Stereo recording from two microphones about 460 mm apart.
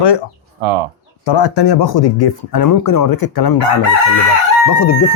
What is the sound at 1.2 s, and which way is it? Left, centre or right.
Speech, left.